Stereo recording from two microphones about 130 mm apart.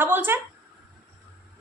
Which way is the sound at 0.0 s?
15° right (ahead or behind).